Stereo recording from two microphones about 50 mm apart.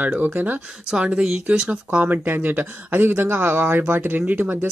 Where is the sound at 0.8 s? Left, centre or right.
Centre.